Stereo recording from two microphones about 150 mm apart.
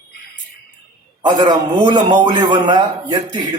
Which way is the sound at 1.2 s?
25° right (ahead or behind).